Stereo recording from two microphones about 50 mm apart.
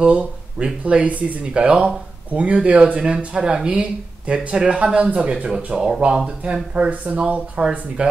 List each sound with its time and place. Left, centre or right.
0.0 s speech: right